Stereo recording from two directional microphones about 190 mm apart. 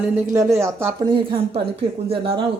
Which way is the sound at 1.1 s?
25° right (ahead or behind).